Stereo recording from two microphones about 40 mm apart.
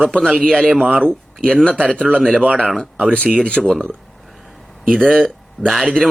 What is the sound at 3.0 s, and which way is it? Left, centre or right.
Speech, left.